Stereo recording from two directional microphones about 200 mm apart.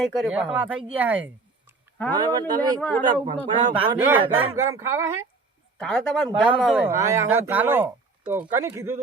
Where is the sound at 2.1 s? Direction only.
20° right (ahead or behind).